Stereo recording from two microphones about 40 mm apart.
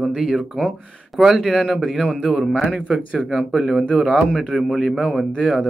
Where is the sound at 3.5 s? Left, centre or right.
Centre.